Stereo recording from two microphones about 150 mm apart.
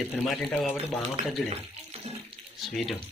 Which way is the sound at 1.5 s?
45° right (ahead or behind).